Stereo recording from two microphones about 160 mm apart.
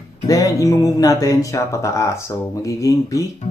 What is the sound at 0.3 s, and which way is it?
Speech, 20° left (ahead or behind).